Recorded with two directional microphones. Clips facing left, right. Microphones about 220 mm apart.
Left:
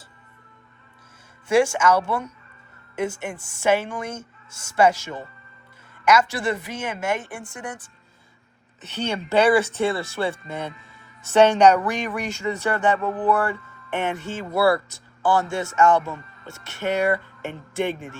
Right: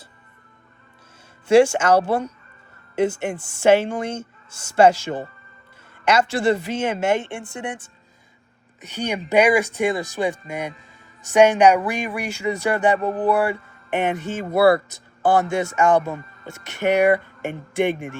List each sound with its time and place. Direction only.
1.5 s speech: 30° right (ahead or behind)
8.8 s speech: 10° right (ahead or behind)